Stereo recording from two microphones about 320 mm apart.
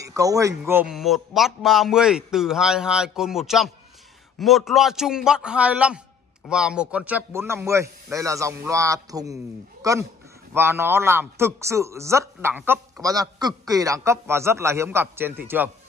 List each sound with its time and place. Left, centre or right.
0.0 s a man's voice: centre
9.8 s a sound: centre
10.5 s a man's voice: centre